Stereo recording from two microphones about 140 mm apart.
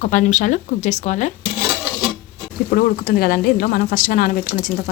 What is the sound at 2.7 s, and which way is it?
Speech, 90° left.